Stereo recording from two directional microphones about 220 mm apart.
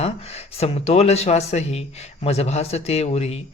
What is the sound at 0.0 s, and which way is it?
Speech, 30° left (ahead or behind).